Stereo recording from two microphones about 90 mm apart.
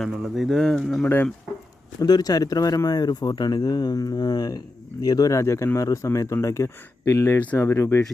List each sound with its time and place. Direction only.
0.0 s speech: 5° right (ahead or behind)
1.0 s speech: 20° left (ahead or behind)
2.0 s speech: 45° left (ahead or behind); by 8.0 s 30° left (ahead or behind)